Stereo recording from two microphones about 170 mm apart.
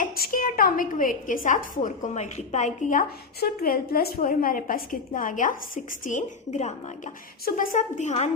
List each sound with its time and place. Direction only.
0.0 s a woman's voice: 55° left (ahead or behind)